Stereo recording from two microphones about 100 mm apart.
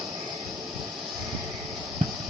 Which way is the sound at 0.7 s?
Centre (ahead or behind).